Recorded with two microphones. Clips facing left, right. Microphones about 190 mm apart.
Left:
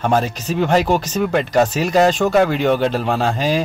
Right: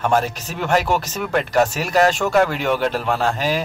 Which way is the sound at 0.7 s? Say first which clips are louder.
Left 1 dB; 20° left (ahead or behind).